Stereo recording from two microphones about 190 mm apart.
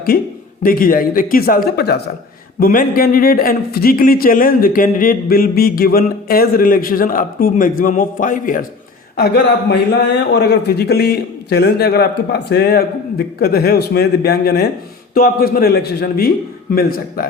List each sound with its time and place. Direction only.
0.1 s speech: 50° left (ahead or behind)
2.6 s speech: 50° left (ahead or behind)
9.1 s a man's voice: 60° left (ahead or behind)